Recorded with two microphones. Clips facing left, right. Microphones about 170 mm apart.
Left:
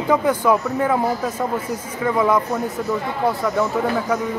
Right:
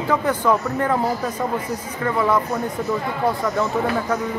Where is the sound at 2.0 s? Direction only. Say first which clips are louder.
Left 2 dB; 15° left (ahead or behind).